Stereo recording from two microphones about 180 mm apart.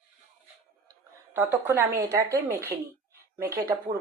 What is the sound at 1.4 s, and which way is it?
A woman's voice, 10° right (ahead or behind).